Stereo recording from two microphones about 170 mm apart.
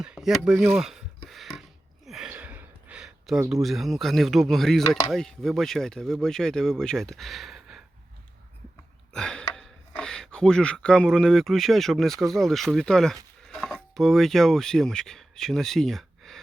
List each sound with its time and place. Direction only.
0.0 s speech: 5° right (ahead or behind)
1.3 s a sound: centre (ahead or behind)
3.5 s speech: centre (ahead or behind)
4.9 s speech: 20° left (ahead or behind)
5.1 s speech: centre (ahead or behind)
9.1 s speech: 5° left (ahead or behind)